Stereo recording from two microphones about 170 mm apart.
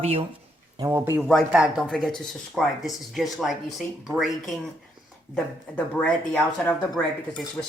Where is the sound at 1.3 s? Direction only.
Centre (ahead or behind).